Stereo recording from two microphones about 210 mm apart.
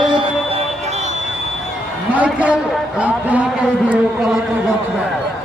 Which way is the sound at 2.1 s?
5° right (ahead or behind).